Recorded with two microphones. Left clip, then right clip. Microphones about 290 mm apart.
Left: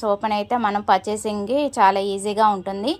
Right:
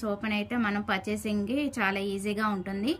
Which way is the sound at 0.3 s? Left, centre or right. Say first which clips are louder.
Left 10 dB; centre.